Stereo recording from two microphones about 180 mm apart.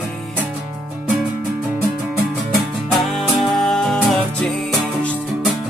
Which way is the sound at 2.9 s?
Centre (ahead or behind).